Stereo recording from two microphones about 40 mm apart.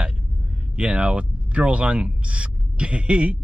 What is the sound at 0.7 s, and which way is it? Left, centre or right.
Speech, right.